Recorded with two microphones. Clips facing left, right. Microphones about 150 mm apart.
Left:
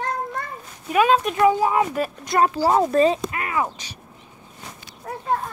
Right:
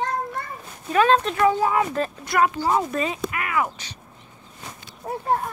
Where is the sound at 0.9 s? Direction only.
15° left (ahead or behind).